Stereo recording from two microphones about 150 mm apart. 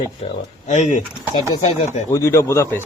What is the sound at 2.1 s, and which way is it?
Speech, 15° left (ahead or behind).